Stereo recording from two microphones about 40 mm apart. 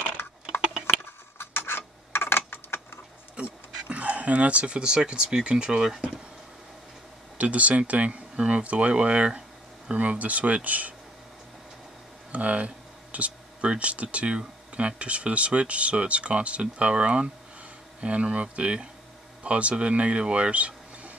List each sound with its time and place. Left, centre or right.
1.4 s a sound: left
3.3 s speech: right
7.3 s speech: right
9.9 s speech: right
12.3 s a sound: right
14.1 s speech: right